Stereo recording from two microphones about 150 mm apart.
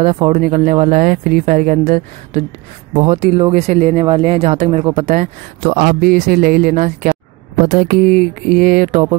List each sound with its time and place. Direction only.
0.4 s speech: 55° right (ahead or behind)
3.0 s speech: 45° right (ahead or behind)
5.7 s speech: 75° right (ahead or behind); by 9.0 s 60° right (ahead or behind)